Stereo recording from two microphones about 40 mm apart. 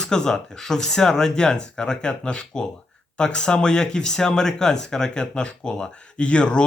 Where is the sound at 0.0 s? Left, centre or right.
Centre.